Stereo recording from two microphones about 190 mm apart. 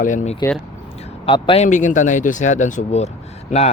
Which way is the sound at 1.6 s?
40° left (ahead or behind).